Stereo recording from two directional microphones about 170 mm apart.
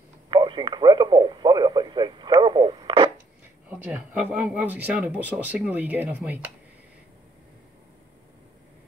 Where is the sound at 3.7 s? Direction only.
10° right (ahead or behind).